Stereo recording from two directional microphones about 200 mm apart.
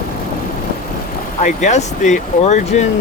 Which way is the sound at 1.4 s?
35° left (ahead or behind).